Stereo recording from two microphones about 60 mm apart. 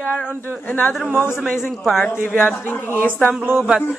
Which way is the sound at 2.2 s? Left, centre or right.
Centre.